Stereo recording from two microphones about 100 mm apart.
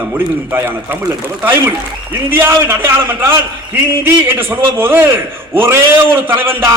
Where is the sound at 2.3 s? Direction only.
20° right (ahead or behind).